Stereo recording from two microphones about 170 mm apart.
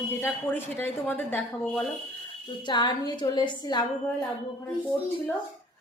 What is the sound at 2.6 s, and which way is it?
A woman's voice, 25° left (ahead or behind).